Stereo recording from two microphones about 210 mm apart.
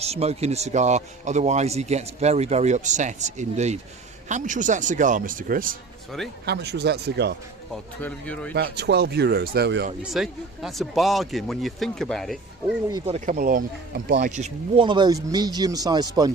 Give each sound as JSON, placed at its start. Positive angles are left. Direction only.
{"t": 0.0, "sound": "speech", "side_deg": -30}
{"t": 6.4, "sound": "speech", "side_deg": -50}
{"t": 8.0, "sound": "speech", "side_deg": 5}
{"t": 8.5, "sound": "speech", "side_deg": -50}
{"t": 10.0, "sound": "speech", "side_deg": 0}
{"t": 12.9, "sound": "speech", "side_deg": -30}